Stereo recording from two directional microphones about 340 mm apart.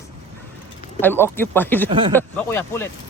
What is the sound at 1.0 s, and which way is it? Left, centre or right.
Speech, centre.